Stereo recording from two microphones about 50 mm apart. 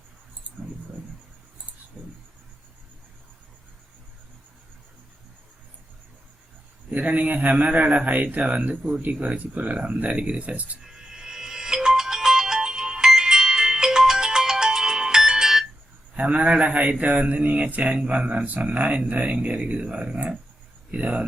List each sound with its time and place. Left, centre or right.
0.4 s a sound: right
2.0 s cricket: centre
6.9 s speech: right
10.8 s ringtone: centre
16.1 s speech: right